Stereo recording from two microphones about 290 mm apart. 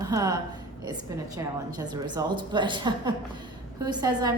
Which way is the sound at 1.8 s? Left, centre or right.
Centre.